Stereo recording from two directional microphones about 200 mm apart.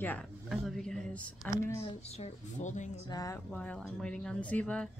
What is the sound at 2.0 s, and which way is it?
Speech, 30° left (ahead or behind).